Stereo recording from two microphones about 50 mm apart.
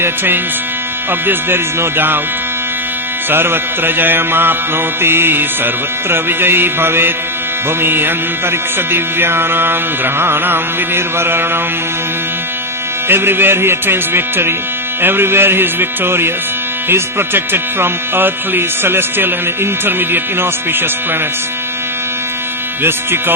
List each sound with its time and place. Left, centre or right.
1.3 s music: right
3.2 s music: right
13.1 s music: right
22.8 s music: right